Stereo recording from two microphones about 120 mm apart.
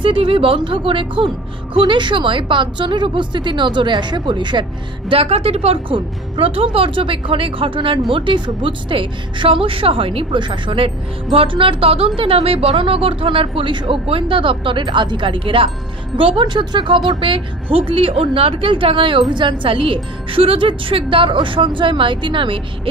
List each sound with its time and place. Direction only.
0.0 s a woman's voice: 50° right (ahead or behind)
5.1 s a woman's voice: 55° right (ahead or behind)